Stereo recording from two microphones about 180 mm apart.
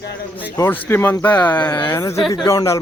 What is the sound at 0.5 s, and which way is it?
A man's voice, 15° left (ahead or behind).